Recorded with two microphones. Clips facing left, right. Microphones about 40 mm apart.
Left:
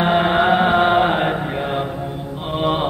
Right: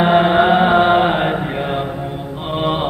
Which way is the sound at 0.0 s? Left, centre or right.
Centre.